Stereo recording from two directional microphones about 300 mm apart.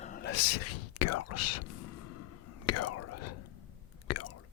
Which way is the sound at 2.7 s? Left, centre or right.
Left.